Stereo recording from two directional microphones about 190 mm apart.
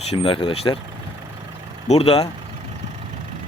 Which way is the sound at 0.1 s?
30° left (ahead or behind).